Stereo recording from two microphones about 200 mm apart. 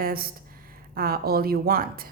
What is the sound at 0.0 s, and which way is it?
A woman's voice, 45° right (ahead or behind).